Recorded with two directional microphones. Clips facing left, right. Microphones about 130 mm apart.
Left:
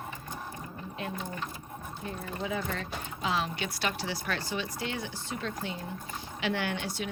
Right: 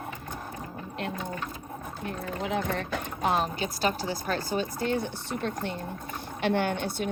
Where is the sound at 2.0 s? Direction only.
70° right (ahead or behind).